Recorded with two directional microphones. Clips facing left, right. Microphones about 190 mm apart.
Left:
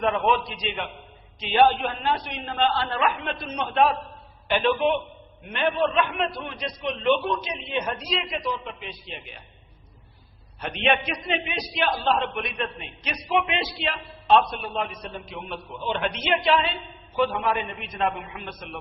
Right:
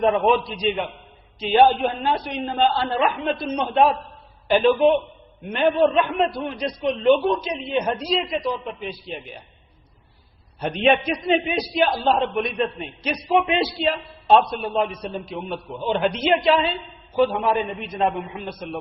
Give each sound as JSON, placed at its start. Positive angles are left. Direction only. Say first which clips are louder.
{"t": 0.0, "sound": "a man's voice", "louder": "right 5 dB", "side_deg": -35}
{"t": 10.6, "sound": "a man's voice", "louder": "right 5 dB", "side_deg": -40}